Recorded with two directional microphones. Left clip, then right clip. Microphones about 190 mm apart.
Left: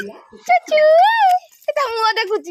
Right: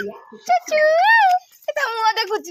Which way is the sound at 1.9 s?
30° left (ahead or behind).